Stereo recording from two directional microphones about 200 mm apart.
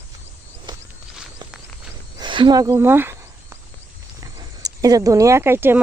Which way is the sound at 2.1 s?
25° right (ahead or behind).